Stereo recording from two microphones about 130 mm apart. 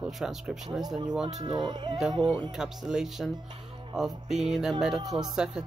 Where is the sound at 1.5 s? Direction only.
35° right (ahead or behind).